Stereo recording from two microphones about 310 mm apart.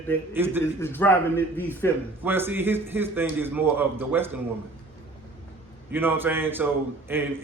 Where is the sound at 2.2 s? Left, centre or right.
Centre.